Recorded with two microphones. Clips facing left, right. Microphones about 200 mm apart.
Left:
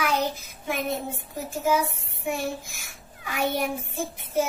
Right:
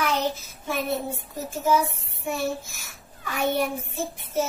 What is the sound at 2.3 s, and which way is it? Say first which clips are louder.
Child singing: right 1 dB; 15° left (ahead or behind).